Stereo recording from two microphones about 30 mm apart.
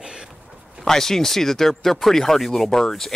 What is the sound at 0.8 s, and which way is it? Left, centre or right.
Speech, centre.